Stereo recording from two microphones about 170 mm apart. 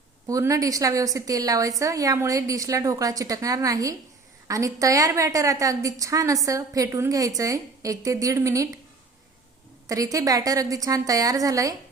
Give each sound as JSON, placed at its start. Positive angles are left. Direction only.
{"t": 0.3, "sound": "a woman's voice", "side_deg": -20}
{"t": 9.9, "sound": "a woman's voice", "side_deg": -20}